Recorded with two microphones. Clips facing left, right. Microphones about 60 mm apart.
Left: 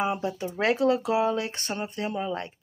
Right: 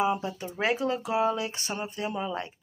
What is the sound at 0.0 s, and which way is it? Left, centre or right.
Speech, left.